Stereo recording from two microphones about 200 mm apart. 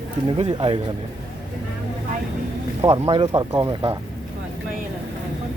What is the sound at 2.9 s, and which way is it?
Speech, 25° right (ahead or behind).